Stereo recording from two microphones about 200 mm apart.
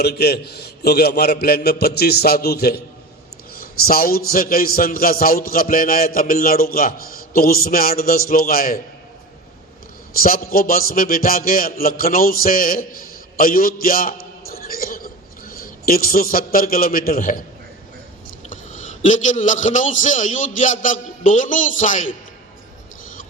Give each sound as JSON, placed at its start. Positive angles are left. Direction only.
{"t": 0.0, "sound": "a man's voice", "side_deg": 55}
{"t": 10.2, "sound": "a man's voice", "side_deg": 45}
{"t": 14.4, "sound": "a sound", "side_deg": 50}
{"t": 18.4, "sound": "a man's voice", "side_deg": 40}